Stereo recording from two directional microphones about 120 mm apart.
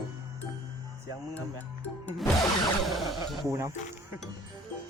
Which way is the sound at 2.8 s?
Centre (ahead or behind).